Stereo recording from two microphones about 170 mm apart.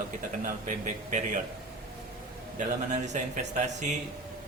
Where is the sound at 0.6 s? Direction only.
45° right (ahead or behind).